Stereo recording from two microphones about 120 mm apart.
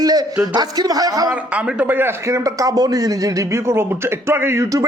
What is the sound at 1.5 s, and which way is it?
A man's voice, 15° right (ahead or behind).